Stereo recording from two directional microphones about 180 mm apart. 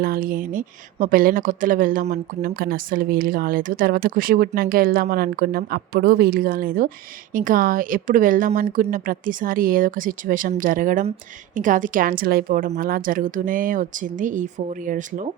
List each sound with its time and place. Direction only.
0.0 s a woman's voice: 55° right (ahead or behind)